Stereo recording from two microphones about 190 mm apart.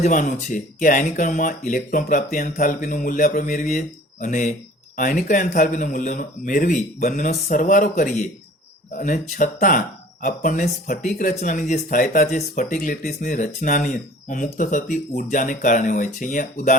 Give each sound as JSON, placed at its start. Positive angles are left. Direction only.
{"t": 0.0, "sound": "a man's voice", "side_deg": 40}